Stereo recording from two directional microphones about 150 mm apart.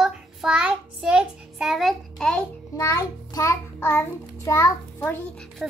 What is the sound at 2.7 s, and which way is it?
A child's voice, 20° left (ahead or behind).